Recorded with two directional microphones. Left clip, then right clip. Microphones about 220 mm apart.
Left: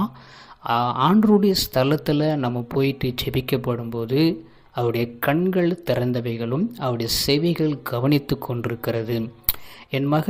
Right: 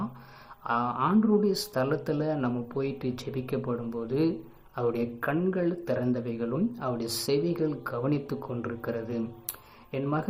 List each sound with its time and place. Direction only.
0.6 s speech: 35° left (ahead or behind)